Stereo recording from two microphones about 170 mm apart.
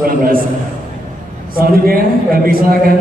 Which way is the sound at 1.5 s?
60° right (ahead or behind).